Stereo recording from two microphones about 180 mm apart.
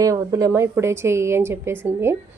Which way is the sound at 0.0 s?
15° right (ahead or behind).